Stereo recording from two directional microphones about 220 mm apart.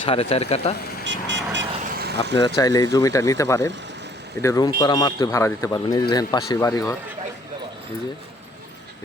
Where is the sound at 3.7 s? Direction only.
55° right (ahead or behind).